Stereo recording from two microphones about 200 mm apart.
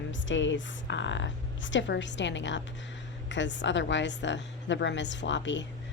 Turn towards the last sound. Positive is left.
turn(degrees=65)  # may be behind; listen again after turning